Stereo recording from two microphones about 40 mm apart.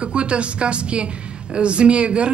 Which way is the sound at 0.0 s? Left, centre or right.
Right.